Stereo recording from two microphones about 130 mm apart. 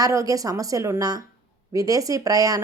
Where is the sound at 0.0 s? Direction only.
25° right (ahead or behind).